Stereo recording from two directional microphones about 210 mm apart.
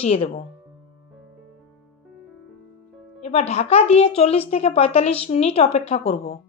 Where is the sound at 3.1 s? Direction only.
30° left (ahead or behind).